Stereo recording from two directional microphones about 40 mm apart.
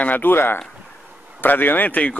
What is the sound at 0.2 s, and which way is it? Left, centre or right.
Speech, left.